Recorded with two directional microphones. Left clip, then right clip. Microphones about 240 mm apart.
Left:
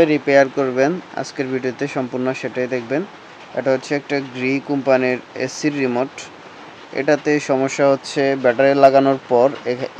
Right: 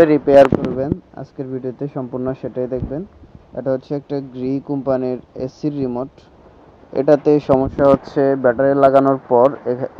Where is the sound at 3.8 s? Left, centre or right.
Centre.